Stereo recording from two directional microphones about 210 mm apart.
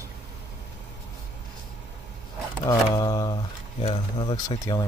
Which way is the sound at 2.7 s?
20° left (ahead or behind).